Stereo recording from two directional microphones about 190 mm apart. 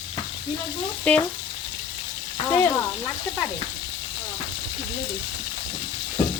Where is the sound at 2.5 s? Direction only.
15° left (ahead or behind).